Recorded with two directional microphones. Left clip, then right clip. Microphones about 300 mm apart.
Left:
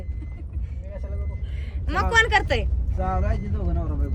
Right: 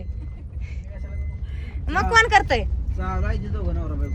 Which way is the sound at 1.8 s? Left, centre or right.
Centre.